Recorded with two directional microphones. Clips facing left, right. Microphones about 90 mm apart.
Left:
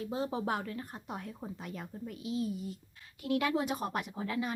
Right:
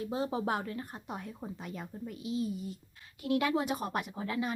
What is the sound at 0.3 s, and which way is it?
Speech, 25° right (ahead or behind).